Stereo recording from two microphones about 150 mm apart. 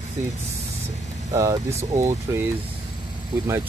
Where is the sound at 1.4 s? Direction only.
20° right (ahead or behind).